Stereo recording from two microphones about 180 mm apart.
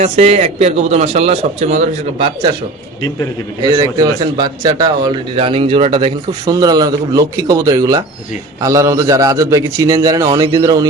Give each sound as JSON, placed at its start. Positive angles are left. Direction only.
{"t": 0.0, "sound": "a man's voice", "side_deg": -40}
{"t": 3.6, "sound": "speech", "side_deg": -20}